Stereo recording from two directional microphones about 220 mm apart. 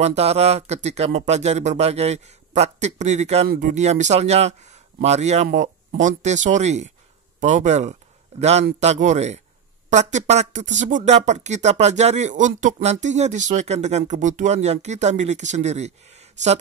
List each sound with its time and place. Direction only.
0.0 s speech: 30° right (ahead or behind)